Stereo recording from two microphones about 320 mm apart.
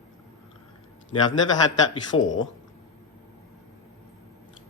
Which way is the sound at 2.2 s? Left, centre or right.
Left.